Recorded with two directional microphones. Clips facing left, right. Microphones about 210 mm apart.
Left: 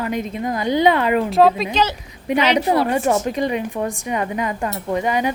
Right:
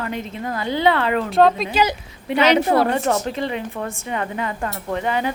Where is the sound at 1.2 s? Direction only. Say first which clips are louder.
Right 2 dB; centre (ahead or behind).